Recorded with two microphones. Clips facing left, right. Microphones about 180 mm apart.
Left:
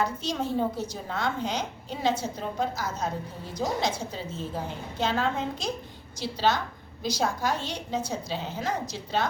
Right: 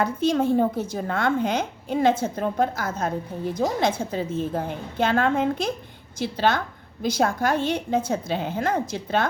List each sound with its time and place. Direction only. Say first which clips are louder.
0.0 s a woman's voice: right 7 dB; 55° right (ahead or behind)